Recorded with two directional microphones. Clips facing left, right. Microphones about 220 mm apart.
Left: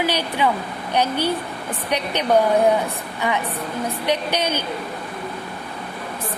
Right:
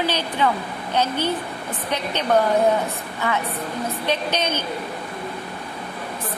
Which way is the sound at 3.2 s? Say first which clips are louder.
Left 1 dB; 15° left (ahead or behind).